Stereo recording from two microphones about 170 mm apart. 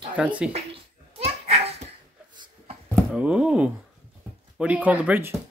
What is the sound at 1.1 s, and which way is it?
Children playing, 35° right (ahead or behind).